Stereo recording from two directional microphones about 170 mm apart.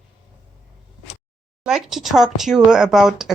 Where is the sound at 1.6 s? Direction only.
Centre (ahead or behind).